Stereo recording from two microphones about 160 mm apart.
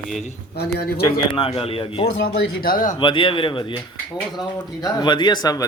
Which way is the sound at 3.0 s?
30° left (ahead or behind).